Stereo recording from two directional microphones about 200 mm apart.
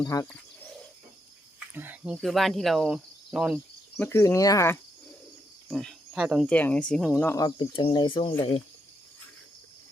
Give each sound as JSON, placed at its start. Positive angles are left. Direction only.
{"t": 0.0, "sound": "speech", "side_deg": 15}
{"t": 1.7, "sound": "speech", "side_deg": -10}
{"t": 4.0, "sound": "speech", "side_deg": 15}
{"t": 5.7, "sound": "speech", "side_deg": 0}
{"t": 6.5, "sound": "speech", "side_deg": 5}
{"t": 7.3, "sound": "speech", "side_deg": 20}